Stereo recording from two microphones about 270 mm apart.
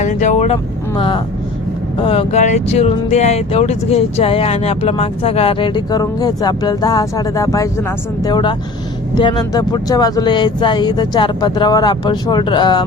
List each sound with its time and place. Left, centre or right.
0.0 s speech: left